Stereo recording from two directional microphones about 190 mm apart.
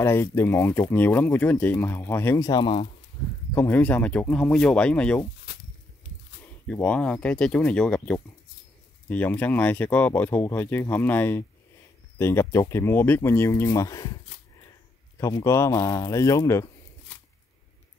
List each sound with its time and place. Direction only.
0.0 s speech: 15° left (ahead or behind)
3.5 s speech: 10° left (ahead or behind)
6.7 s speech: 5° left (ahead or behind)
15.1 s speech: 15° left (ahead or behind)